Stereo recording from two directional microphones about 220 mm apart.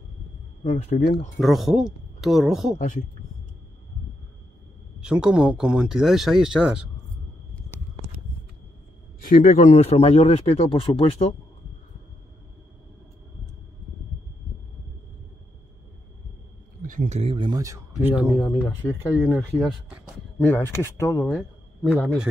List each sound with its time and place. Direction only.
0.7 s speech: 35° left (ahead or behind)
1.4 s speech: centre (ahead or behind)
5.0 s speech: 5° right (ahead or behind)
9.2 s speech: 35° left (ahead or behind)
16.8 s speech: 40° right (ahead or behind); by 18.1 s 15° right (ahead or behind)
18.4 s speech: 15° left (ahead or behind)
19.1 s speech: 5° right (ahead or behind)
20.3 s speech: 10° left (ahead or behind)
21.4 s a man's voice: 5° right (ahead or behind)